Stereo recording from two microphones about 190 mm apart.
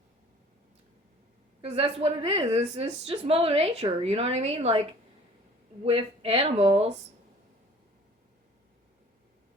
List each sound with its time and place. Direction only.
1.6 s speech: 35° right (ahead or behind)
5.8 s speech: 30° right (ahead or behind)